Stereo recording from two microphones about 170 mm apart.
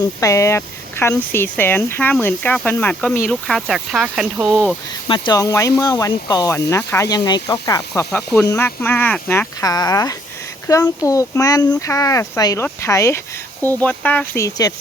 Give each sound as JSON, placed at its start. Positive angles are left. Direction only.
{"t": 0.2, "sound": "speech", "side_deg": 20}
{"t": 4.5, "sound": "speech", "side_deg": 5}
{"t": 5.0, "sound": "speech", "side_deg": 30}